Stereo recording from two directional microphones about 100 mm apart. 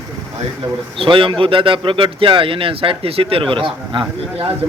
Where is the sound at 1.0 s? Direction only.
55° right (ahead or behind).